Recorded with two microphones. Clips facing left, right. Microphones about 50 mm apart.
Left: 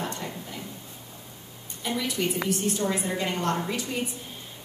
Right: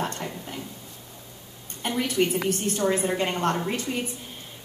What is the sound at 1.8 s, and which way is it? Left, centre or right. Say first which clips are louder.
A woman's voice: right 4 dB; right.